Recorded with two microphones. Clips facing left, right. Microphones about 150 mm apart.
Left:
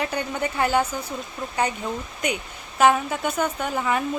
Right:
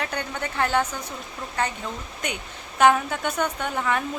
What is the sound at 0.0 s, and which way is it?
Speech, 5° left (ahead or behind).